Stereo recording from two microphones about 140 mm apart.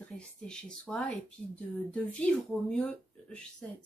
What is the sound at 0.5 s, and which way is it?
A woman's voice, 5° left (ahead or behind).